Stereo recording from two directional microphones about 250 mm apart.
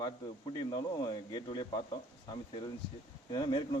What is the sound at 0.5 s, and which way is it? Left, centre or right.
A man's voice, centre.